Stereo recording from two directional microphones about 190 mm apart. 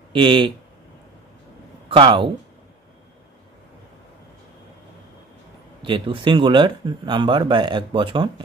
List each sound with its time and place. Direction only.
0.1 s speech: 25° right (ahead or behind)
1.9 s a man's voice: 25° right (ahead or behind)
5.8 s a man's voice: 25° right (ahead or behind)